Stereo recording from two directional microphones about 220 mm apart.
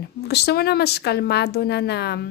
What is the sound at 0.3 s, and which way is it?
Speech, 45° left (ahead or behind).